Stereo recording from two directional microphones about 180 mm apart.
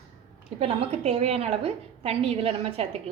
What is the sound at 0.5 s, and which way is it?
A woman's voice, 35° right (ahead or behind).